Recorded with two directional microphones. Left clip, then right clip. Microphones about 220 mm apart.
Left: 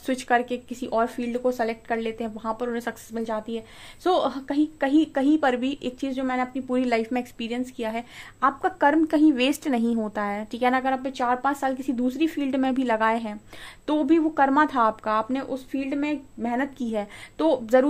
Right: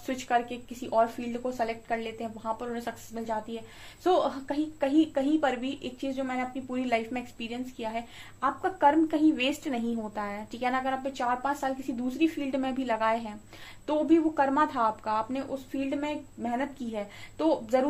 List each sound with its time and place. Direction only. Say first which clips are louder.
0.0 s speech: left 5 dB; 50° left (ahead or behind)